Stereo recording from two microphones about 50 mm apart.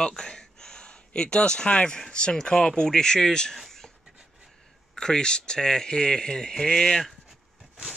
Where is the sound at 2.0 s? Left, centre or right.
Centre.